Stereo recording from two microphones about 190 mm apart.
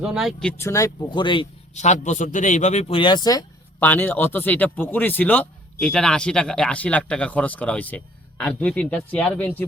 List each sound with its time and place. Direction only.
0.0 s speech: 5° right (ahead or behind)
0.7 s speech: 20° left (ahead or behind)
1.7 s a man's voice: 40° left (ahead or behind); by 9.5 s 10° left (ahead or behind)